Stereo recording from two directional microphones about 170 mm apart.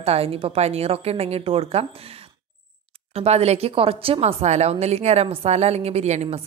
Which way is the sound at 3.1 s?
35° right (ahead or behind).